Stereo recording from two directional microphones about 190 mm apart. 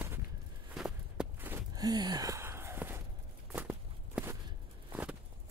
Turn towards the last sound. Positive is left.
turn(degrees=-10)  # may be behind; listen again after turning